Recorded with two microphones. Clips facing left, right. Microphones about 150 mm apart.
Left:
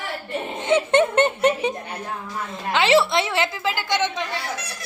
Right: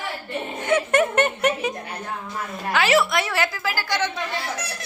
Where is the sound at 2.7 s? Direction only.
25° left (ahead or behind).